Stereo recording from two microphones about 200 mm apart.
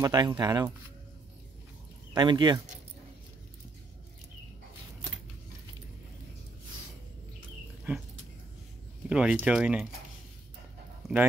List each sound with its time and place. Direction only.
0.0 s speech: 20° right (ahead or behind)
2.1 s speech: 20° right (ahead or behind)
7.9 s dog: 10° right (ahead or behind)
9.1 s speech: 5° right (ahead or behind)